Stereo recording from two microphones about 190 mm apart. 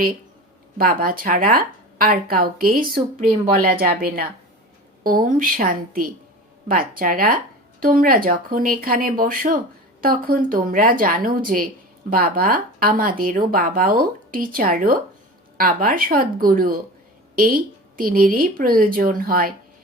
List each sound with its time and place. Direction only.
0.8 s speech: 50° right (ahead or behind)